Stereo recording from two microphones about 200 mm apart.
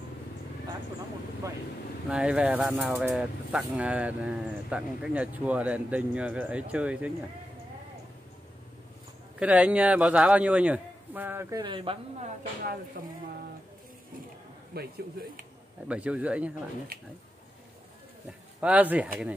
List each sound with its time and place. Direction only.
2.0 s speech: 5° right (ahead or behind)
9.4 s speech: 5° right (ahead or behind)
11.6 s speech: 25° right (ahead or behind)
13.0 s speech: 40° right (ahead or behind)
14.7 s speech: 50° right (ahead or behind)
15.9 s speech: 5° right (ahead or behind)
18.6 s speech: 5° right (ahead or behind)